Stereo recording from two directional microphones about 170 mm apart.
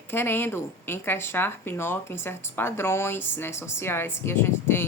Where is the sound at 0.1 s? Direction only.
15° left (ahead or behind).